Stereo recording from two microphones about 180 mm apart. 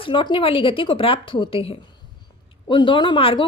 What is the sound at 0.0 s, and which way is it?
Speech, 30° left (ahead or behind).